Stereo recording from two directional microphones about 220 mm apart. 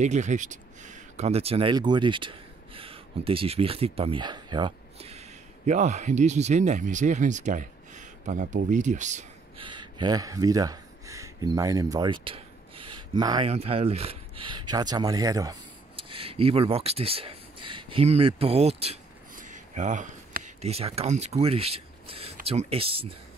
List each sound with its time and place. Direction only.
0.0 s speech: 35° right (ahead or behind)
9.7 s a sound: 20° right (ahead or behind)
13.5 s speech: 30° right (ahead or behind)